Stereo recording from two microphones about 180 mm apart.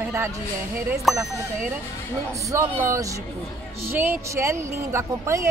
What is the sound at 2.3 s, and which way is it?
A woman's voice, 15° right (ahead or behind).